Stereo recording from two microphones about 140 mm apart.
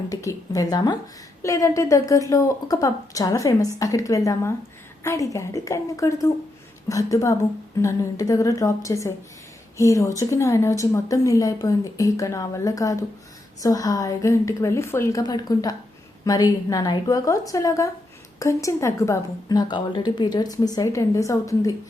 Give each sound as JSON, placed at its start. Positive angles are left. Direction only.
{"t": 0.1, "sound": "a woman's voice", "side_deg": 25}